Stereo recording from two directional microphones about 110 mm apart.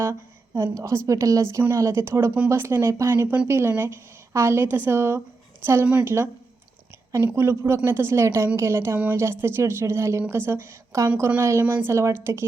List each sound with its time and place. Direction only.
0.0 s speech: 25° right (ahead or behind)
7.1 s speech: 20° right (ahead or behind)